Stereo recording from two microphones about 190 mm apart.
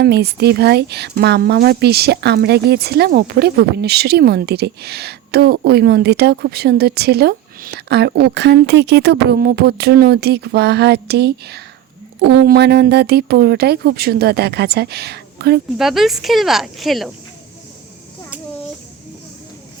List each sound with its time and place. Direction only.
0.0 s a woman's voice: 60° right (ahead or behind)
15.8 s speech: centre (ahead or behind)